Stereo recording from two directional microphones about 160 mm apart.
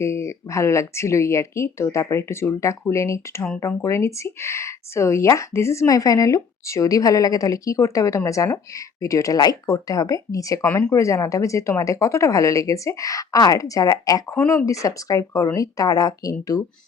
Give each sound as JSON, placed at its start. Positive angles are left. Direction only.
{"t": 0.0, "sound": "speech", "side_deg": 15}